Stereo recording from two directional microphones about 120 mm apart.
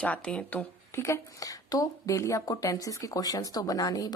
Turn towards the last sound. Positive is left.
turn(degrees=30)  # may be behind; listen again after turning